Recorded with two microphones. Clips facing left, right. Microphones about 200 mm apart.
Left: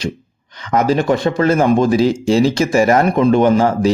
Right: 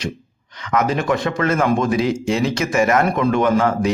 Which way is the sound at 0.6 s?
30° left (ahead or behind).